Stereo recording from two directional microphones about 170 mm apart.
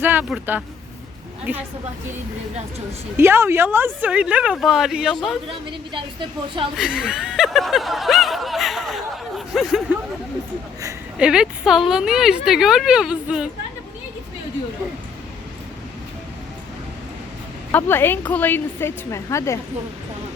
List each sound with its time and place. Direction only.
0.0 s a woman's voice: 10° right (ahead or behind)
3.2 s a woman's voice: 15° right (ahead or behind)
5.5 s a woman's voice: 30° right (ahead or behind)
6.7 s speech: 5° right (ahead or behind)
11.2 s speech: 5° right (ahead or behind)
17.7 s a woman's voice: 10° left (ahead or behind)